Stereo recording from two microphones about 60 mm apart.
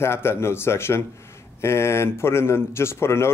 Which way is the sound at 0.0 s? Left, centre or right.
Left.